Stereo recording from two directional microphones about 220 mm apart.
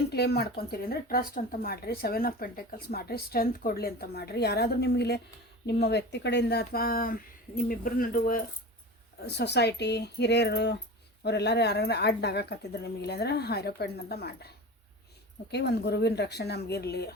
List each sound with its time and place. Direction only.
0.1 s speech: 45° left (ahead or behind)